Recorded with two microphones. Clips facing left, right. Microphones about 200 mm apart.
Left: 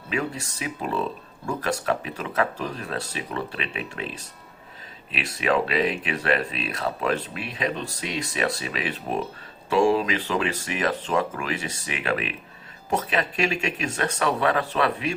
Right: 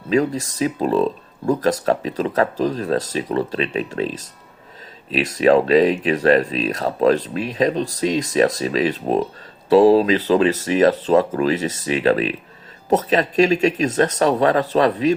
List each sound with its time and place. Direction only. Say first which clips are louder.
0.3 s speech: right 11 dB; 40° right (ahead or behind)
5.1 s speech: right 9 dB; 40° right (ahead or behind)